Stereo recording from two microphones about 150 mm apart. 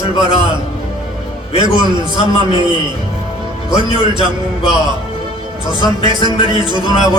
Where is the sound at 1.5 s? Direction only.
30° right (ahead or behind).